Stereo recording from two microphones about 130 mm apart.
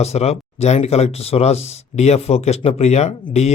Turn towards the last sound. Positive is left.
turn(degrees=55)  # may be behind; listen again after turning